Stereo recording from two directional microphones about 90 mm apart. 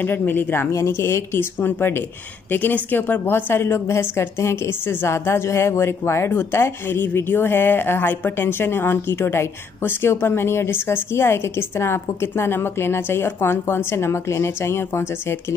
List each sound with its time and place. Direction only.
0.0 s a woman's voice: 25° left (ahead or behind)